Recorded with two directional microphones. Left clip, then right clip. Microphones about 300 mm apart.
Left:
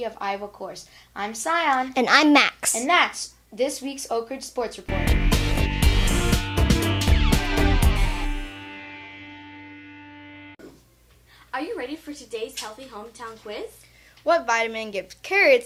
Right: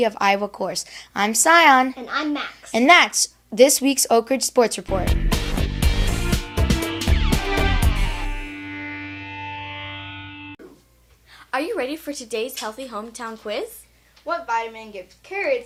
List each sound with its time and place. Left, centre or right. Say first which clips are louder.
0.0 s speech: right 9 dB; right
2.0 s a child's voice: left 9 dB; left
2.7 s speech: right 8 dB; right
5.0 s music: left 1 dB; centre
11.5 s a woman's voice: right 6 dB; right
14.3 s speech: left 3 dB; left